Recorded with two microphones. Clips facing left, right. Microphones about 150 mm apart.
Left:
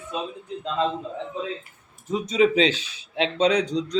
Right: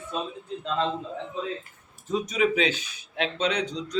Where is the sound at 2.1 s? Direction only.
30° left (ahead or behind).